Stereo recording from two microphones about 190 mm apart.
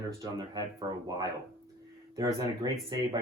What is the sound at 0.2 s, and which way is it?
Speech, 20° right (ahead or behind).